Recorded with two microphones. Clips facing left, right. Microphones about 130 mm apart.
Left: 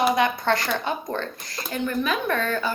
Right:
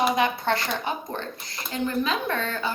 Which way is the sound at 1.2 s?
25° right (ahead or behind).